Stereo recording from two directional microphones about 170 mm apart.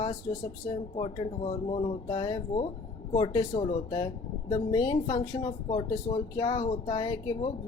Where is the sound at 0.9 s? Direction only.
30° left (ahead or behind).